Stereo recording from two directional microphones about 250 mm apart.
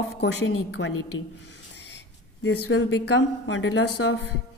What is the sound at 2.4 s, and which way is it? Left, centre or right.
A woman's voice, left.